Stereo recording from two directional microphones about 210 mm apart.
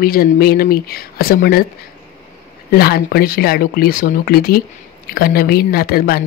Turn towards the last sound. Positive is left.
turn(degrees=45)  # may be behind; listen again after turning